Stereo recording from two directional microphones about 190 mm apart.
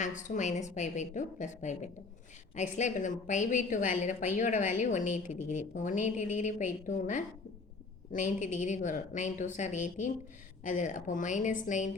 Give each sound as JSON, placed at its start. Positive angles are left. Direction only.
{"t": 0.0, "sound": "a woman's voice", "side_deg": 40}